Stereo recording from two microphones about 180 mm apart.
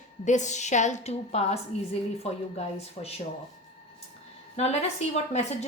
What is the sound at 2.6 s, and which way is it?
Speech, 35° left (ahead or behind).